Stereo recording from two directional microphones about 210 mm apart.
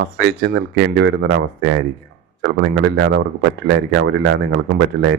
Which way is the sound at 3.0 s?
55° right (ahead or behind).